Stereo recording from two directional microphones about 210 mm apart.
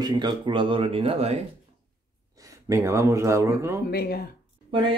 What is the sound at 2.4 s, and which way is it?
Speech, 15° right (ahead or behind).